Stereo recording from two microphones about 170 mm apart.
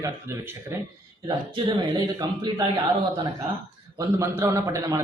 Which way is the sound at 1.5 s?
30° right (ahead or behind).